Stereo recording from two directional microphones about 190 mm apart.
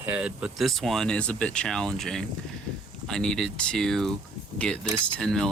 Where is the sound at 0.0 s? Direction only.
5° right (ahead or behind).